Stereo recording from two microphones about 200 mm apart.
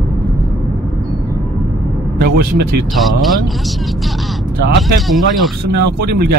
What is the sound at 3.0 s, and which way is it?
Speech, centre (ahead or behind).